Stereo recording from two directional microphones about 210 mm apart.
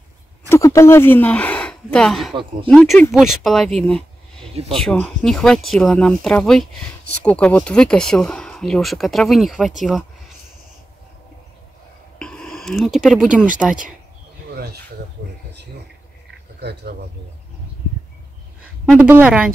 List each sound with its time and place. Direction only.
0.5 s speech: 15° left (ahead or behind)
12.2 s speech: 5° left (ahead or behind)
16.5 s speech: 50° right (ahead or behind)
18.9 s speech: 5° right (ahead or behind)